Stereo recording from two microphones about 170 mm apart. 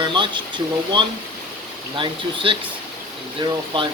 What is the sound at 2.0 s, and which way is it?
Speech, 30° right (ahead or behind).